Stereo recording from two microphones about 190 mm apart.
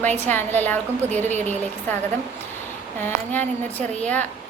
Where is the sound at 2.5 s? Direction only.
10° left (ahead or behind).